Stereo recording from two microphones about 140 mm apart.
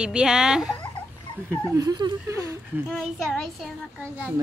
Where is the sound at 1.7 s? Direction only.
25° right (ahead or behind).